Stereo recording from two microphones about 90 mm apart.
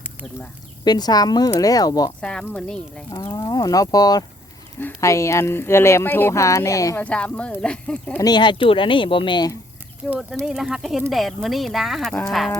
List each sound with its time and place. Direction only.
0.9 s speech: 50° left (ahead or behind)
2.2 s speech: 10° left (ahead or behind)
3.1 s speech: 40° left (ahead or behind)
4.9 s speech: 35° left (ahead or behind)
6.9 s speech: 15° left (ahead or behind)
8.2 s speech: 55° left (ahead or behind)
10.2 s speech: centre (ahead or behind)